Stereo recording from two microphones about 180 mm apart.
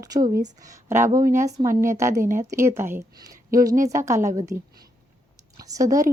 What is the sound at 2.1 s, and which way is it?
Speech, 45° right (ahead or behind).